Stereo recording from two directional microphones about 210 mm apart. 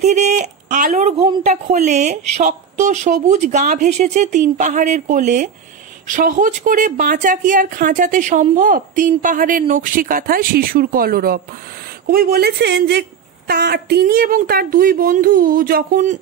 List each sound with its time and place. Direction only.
0.0 s a woman's voice: 35° right (ahead or behind)